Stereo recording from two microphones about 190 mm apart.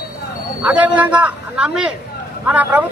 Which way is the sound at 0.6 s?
5° right (ahead or behind).